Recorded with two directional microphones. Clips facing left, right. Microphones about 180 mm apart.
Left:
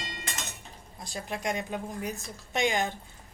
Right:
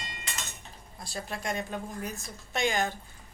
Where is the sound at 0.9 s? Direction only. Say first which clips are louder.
Left 1 dB; 15° left (ahead or behind).